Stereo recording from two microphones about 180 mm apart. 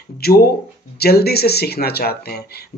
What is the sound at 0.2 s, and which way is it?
Speech, 60° left (ahead or behind).